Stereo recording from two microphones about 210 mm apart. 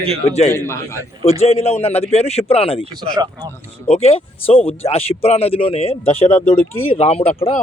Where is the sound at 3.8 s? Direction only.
30° left (ahead or behind).